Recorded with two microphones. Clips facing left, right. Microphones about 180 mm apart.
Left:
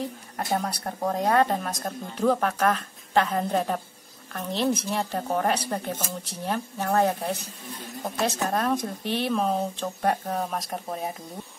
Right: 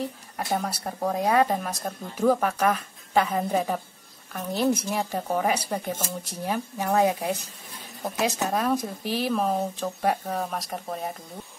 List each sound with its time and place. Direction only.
0.4 s speech: centre (ahead or behind)